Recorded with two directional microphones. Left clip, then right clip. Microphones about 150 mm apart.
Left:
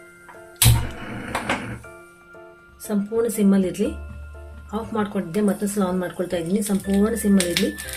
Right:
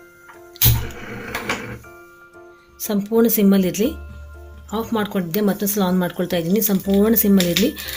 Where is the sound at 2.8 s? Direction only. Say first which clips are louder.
Right 5 dB; 80° right.